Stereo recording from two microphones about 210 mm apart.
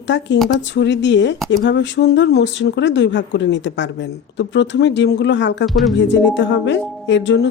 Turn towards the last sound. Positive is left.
turn(degrees=60)  # may be behind; listen again after turning